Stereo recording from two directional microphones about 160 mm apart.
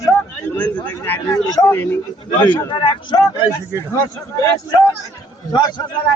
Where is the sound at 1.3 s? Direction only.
25° left (ahead or behind).